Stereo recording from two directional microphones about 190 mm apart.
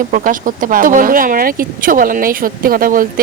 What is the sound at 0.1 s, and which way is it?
A woman's voice, 45° right (ahead or behind).